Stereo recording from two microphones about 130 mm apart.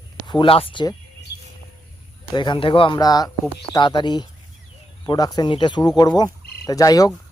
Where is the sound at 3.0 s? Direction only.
30° left (ahead or behind).